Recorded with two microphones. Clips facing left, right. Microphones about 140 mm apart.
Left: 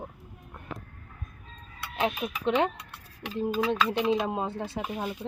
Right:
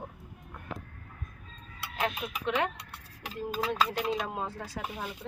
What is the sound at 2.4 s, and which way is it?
Speech, 30° left (ahead or behind).